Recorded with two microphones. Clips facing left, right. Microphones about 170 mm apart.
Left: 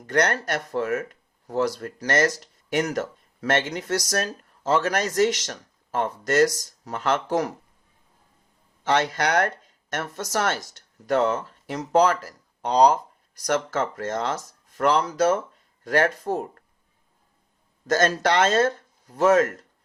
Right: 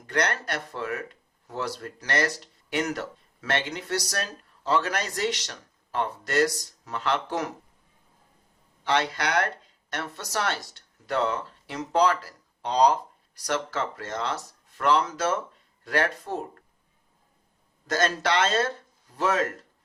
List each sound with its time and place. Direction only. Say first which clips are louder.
0.0 s speech: left 5 dB; 45° left (ahead or behind)
8.8 s speech: left 3 dB; 45° left (ahead or behind)
17.8 s speech: left 4 dB; 45° left (ahead or behind)